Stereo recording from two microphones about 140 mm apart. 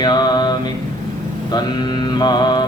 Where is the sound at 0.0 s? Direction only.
30° left (ahead or behind).